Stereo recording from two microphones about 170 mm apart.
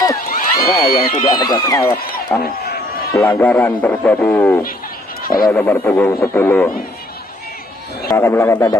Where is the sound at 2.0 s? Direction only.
60° left (ahead or behind).